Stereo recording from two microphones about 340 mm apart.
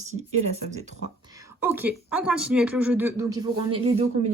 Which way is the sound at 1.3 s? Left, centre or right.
Centre.